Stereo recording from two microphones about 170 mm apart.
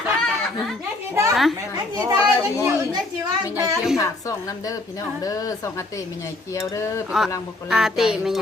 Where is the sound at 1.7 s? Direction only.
20° right (ahead or behind).